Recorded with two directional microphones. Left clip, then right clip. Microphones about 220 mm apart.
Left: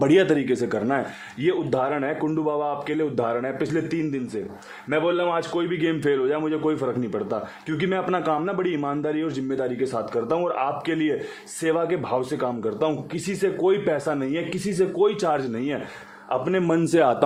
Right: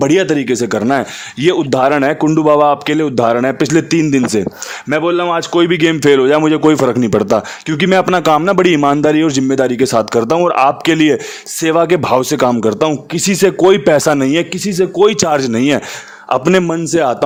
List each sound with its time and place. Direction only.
0.0 s a man's voice: 25° right (ahead or behind); by 16.6 s 50° right (ahead or behind)
16.6 s a man's voice: 20° right (ahead or behind)